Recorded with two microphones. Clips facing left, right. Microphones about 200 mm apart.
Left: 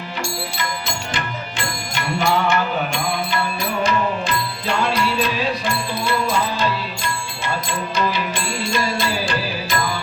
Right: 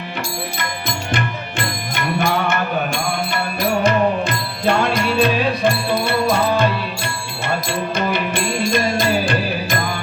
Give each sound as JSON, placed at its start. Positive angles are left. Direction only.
{"t": 0.9, "sound": "music", "side_deg": -55}